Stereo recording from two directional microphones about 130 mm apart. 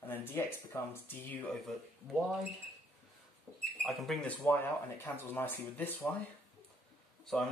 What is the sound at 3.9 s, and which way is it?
Speech, centre (ahead or behind).